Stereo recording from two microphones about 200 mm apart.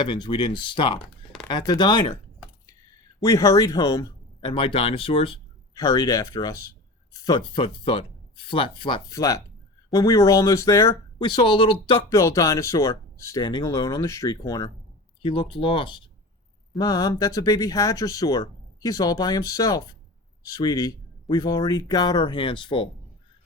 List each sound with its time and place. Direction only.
0.0 s speech: 25° left (ahead or behind)
3.2 s speech: 15° left (ahead or behind)